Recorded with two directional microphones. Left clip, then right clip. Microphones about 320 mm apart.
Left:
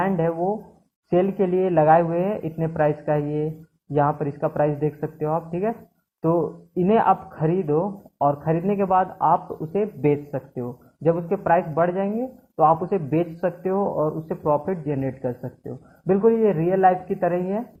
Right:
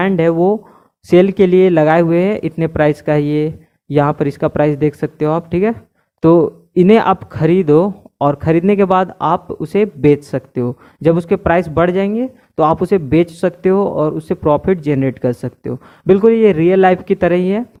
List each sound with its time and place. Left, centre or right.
0.0 s speech: right